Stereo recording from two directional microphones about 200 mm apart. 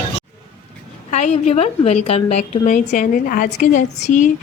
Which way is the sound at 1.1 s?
35° left (ahead or behind).